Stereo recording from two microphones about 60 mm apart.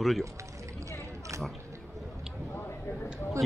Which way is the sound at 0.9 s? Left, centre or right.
Right.